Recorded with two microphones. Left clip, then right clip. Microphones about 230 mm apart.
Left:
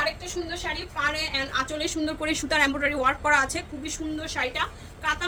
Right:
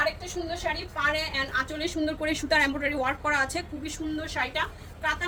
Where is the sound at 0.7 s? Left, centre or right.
Centre.